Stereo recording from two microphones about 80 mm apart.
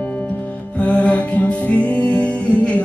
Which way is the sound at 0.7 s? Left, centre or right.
Centre.